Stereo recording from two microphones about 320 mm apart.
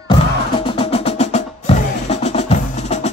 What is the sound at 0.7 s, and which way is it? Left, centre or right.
Percussion, centre.